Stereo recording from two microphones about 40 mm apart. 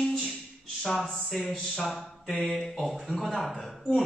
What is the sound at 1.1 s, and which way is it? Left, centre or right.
Speech, centre.